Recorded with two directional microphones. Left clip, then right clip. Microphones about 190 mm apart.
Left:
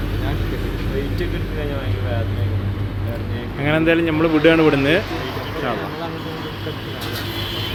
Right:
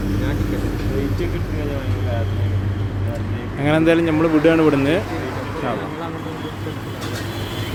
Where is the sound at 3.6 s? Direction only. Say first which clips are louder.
Right 1 dB; 15° right (ahead or behind).